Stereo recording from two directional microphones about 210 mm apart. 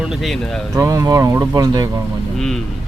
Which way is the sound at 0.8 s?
15° right (ahead or behind).